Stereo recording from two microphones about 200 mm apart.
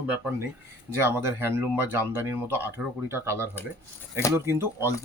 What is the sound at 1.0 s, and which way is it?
Speech, 10° right (ahead or behind).